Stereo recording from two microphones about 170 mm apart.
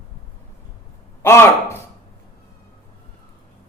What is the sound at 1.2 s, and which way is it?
Speech, 15° left (ahead or behind).